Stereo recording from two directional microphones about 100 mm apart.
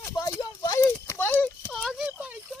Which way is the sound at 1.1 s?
20° left (ahead or behind).